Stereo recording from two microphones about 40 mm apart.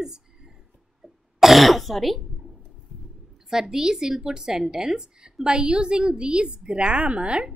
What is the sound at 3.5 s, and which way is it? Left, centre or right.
A woman's voice, centre.